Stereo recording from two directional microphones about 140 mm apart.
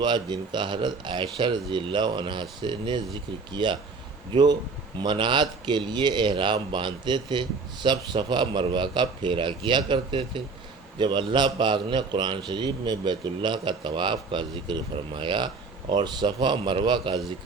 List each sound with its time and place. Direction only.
0.0 s speech: 35° right (ahead or behind)
4.9 s speech: 35° right (ahead or behind)